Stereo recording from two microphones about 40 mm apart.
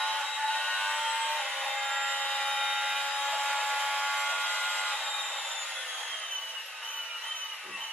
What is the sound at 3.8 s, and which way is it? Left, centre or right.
Tools, centre.